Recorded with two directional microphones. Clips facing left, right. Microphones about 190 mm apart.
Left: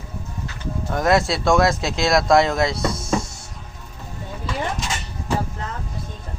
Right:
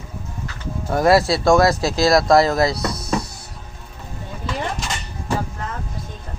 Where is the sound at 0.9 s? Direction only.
5° right (ahead or behind).